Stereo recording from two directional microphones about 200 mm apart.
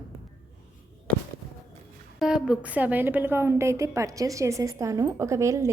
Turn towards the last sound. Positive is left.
turn(degrees=-15)  # may be behind; listen again after turning